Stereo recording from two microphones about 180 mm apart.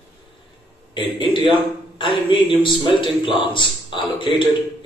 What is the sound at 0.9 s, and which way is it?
A man's voice, 25° left (ahead or behind).